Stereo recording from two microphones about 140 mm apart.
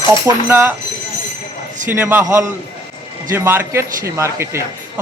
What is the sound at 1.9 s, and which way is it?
Speech, 15° right (ahead or behind).